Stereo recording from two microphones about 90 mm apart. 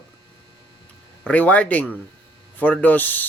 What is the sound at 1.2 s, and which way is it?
Speech, 15° left (ahead or behind).